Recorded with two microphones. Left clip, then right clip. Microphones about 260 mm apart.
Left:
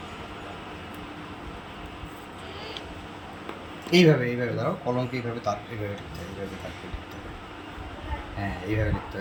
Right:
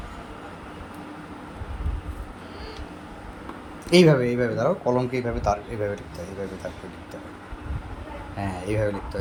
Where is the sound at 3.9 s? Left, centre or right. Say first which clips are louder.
Right 3 dB; centre.